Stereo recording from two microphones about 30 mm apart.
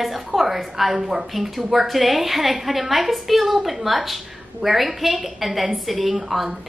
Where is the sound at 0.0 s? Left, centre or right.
Centre.